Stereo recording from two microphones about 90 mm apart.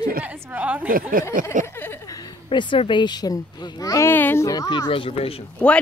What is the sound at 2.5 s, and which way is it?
Speech, 65° left (ahead or behind).